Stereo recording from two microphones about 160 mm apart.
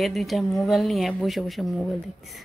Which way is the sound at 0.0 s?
Centre (ahead or behind).